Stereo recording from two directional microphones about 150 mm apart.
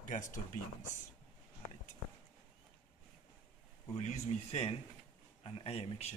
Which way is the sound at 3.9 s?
50° left (ahead or behind).